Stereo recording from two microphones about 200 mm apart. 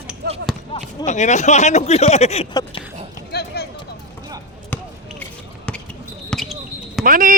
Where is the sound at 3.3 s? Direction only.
55° left (ahead or behind).